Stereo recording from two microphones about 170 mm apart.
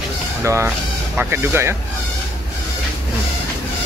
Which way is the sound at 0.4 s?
15° right (ahead or behind).